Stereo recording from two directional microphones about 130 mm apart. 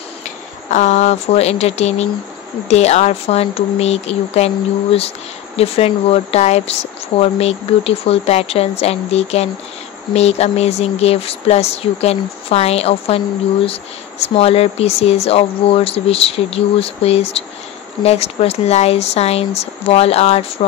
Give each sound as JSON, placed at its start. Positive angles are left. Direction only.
{"t": 0.7, "sound": "speech", "side_deg": 65}
{"t": 5.6, "sound": "speech", "side_deg": 50}
{"t": 14.2, "sound": "speech", "side_deg": 50}